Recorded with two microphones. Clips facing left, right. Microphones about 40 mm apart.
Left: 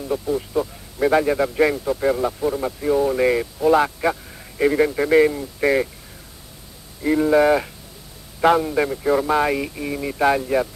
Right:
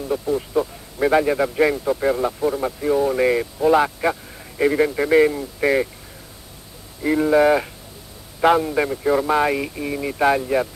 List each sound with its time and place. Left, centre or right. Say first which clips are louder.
0.0 s a man's voice: right 1 dB; centre
7.0 s a man's voice: even; centre